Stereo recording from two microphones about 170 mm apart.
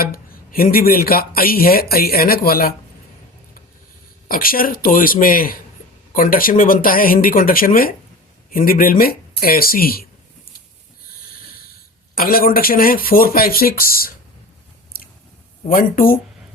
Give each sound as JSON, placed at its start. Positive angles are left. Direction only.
{"t": 0.0, "sound": "speech", "side_deg": 60}
{"t": 4.3, "sound": "speech", "side_deg": 55}
{"t": 14.9, "sound": "chewing", "side_deg": 60}
{"t": 15.7, "sound": "speech", "side_deg": 55}